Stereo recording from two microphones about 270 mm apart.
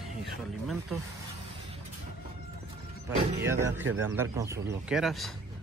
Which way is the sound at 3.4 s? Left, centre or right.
Centre.